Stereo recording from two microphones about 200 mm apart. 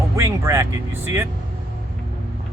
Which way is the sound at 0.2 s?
15° right (ahead or behind).